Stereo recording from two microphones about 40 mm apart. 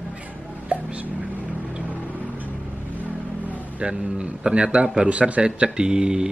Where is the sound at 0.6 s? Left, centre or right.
Right.